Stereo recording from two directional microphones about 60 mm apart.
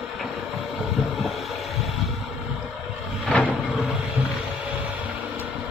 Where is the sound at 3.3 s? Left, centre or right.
Left.